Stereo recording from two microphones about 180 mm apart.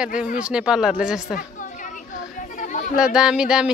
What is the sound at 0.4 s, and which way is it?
Speech, 5° right (ahead or behind).